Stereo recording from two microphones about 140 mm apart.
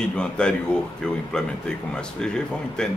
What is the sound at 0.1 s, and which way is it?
Speech, 5° left (ahead or behind).